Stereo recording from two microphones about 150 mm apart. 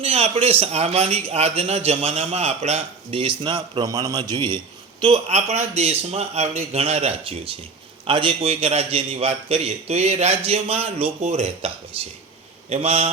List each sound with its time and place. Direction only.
0.0 s a man's voice: 45° right (ahead or behind)